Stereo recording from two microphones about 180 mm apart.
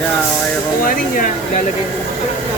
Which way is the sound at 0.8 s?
50° left (ahead or behind).